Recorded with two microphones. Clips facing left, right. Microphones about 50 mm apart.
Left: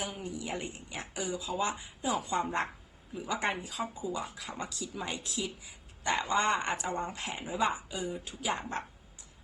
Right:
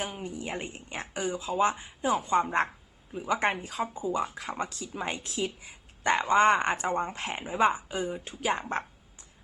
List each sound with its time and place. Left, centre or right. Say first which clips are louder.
0.0 s speech: right 3 dB; right